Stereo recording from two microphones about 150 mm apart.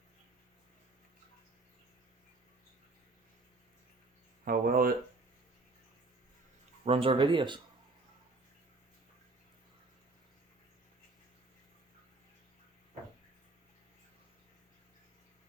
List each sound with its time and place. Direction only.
4.4 s speech: 75° right (ahead or behind)
6.8 s speech: 40° right (ahead or behind)